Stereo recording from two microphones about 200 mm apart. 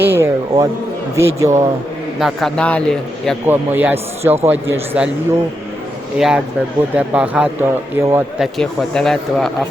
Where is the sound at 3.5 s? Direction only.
10° right (ahead or behind).